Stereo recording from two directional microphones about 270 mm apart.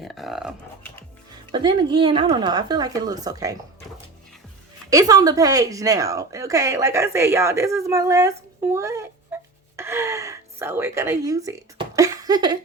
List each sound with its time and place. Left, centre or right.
0.0 s speech: centre
1.5 s speech: centre
4.9 s speech: centre
9.7 s gasp: centre